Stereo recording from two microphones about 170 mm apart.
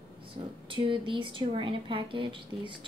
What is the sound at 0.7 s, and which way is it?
A woman's voice, 30° right (ahead or behind).